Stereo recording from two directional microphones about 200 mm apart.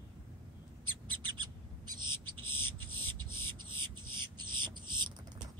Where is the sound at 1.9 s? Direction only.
20° right (ahead or behind).